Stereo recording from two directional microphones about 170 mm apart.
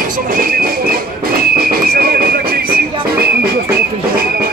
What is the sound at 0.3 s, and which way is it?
Whistle, 60° right (ahead or behind).